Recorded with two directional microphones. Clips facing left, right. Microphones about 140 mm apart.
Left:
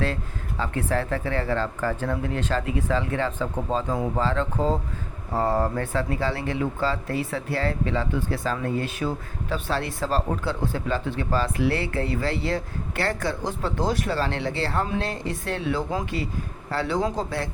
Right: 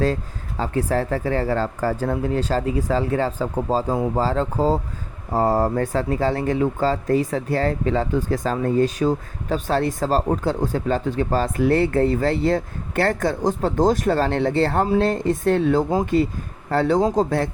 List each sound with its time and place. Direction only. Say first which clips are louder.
0.0 s speech: right 6 dB; 40° right (ahead or behind)